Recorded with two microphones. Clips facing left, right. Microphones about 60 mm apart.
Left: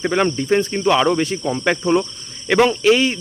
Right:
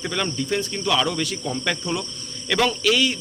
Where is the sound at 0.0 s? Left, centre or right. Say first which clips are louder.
Left 8 dB; left.